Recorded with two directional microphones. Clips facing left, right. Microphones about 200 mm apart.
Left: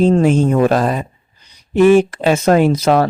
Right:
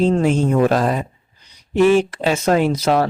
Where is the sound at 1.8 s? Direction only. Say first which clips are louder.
Left 5 dB; 50° left (ahead or behind).